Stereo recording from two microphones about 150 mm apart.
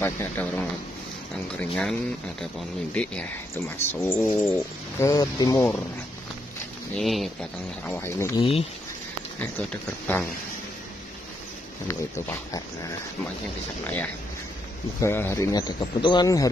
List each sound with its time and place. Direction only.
0.0 s speech: 15° left (ahead or behind)
7.0 s speech: centre (ahead or behind)
7.8 s speech: 15° left (ahead or behind)
8.4 s speech: 40° left (ahead or behind)
9.4 s speech: 10° left (ahead or behind)
11.9 s speech: 20° left (ahead or behind)